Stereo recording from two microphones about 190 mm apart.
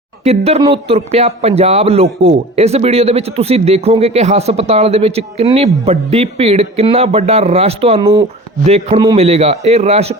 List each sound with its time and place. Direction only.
0.3 s a man's voice: 35° right (ahead or behind)